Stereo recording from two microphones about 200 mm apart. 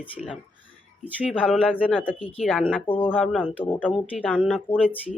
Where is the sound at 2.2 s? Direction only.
30° left (ahead or behind).